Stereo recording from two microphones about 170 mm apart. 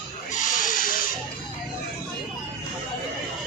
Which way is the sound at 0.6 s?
55° left (ahead or behind).